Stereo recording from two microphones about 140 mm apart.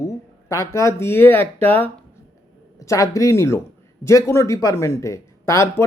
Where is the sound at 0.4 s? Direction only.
20° left (ahead or behind).